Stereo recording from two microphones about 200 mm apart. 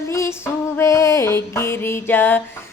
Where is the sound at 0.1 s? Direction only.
15° left (ahead or behind).